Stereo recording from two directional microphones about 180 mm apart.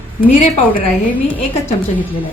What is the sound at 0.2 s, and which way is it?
Speech, 50° left (ahead or behind).